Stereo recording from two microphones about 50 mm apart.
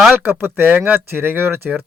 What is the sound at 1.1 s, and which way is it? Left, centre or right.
Speech, right.